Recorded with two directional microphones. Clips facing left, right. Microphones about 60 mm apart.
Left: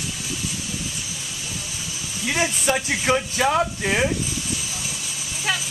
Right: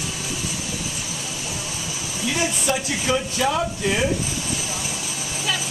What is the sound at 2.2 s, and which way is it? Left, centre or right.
Speech, left.